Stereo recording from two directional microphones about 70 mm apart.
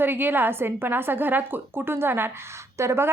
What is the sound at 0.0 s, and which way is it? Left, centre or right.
A woman's voice, right.